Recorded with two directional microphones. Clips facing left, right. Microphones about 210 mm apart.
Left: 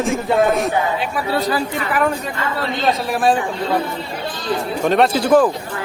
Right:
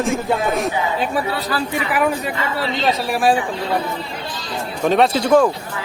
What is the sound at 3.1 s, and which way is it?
Speech, 5° right (ahead or behind).